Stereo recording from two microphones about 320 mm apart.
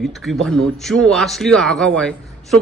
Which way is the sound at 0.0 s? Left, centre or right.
Centre.